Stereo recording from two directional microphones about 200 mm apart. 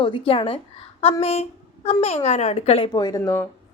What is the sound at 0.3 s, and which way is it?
A woman's voice, 25° left (ahead or behind).